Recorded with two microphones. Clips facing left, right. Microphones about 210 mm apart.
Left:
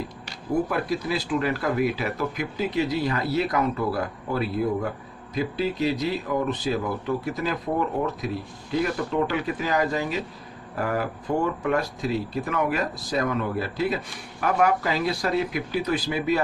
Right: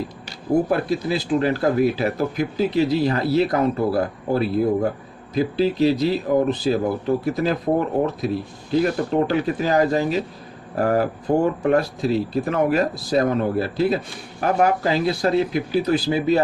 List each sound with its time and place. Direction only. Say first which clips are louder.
0.7 s speech: right 5 dB; 30° right (ahead or behind)